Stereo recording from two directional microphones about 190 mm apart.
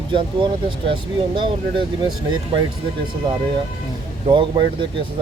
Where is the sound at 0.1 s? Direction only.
25° right (ahead or behind).